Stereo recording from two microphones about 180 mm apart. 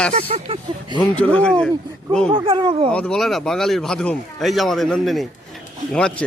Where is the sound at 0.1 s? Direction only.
35° right (ahead or behind).